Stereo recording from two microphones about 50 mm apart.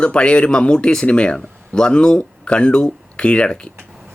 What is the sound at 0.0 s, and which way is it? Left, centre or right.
Speech, left.